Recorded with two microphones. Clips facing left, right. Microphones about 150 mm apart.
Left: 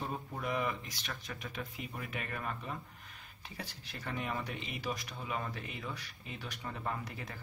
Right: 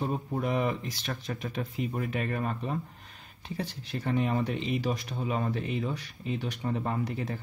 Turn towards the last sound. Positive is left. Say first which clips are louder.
# right 9 dB
turn(degrees=-25)  # may be behind; listen again after turning